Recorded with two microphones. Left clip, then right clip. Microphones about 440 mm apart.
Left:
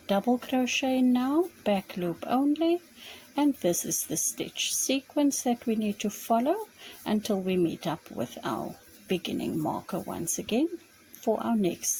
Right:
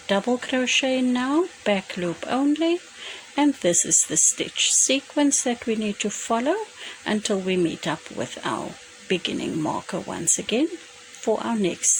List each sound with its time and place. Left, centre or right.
0.1 s speech: left